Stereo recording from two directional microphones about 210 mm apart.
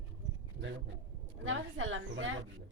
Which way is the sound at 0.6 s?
55° right (ahead or behind).